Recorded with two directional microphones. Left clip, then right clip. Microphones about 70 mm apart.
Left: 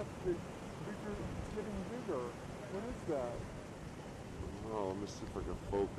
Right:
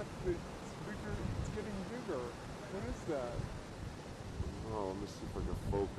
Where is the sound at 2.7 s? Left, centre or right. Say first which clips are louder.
Left 1 dB; right.